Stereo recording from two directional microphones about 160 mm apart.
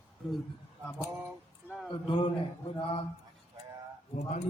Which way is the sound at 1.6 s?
Centre (ahead or behind).